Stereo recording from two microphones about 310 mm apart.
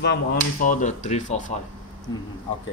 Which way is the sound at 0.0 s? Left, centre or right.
Left.